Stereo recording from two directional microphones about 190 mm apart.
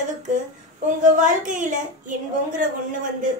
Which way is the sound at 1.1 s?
40° right (ahead or behind).